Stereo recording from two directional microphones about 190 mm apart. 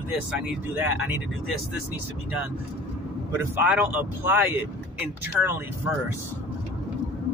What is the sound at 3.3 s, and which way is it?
Speech, 10° right (ahead or behind).